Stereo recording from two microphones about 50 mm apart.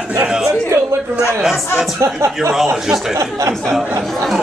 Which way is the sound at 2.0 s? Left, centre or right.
Right.